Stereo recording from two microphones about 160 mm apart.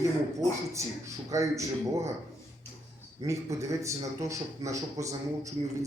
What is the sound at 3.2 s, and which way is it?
A man's voice, 20° right (ahead or behind).